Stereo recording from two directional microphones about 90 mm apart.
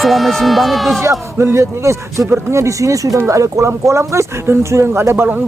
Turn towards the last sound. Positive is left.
turn(degrees=-30)  # may be behind; listen again after turning